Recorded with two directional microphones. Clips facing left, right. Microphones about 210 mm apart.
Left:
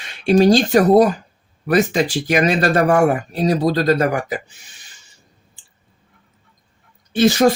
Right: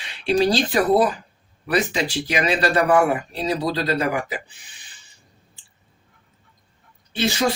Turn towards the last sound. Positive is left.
turn(degrees=45)  # may be behind; listen again after turning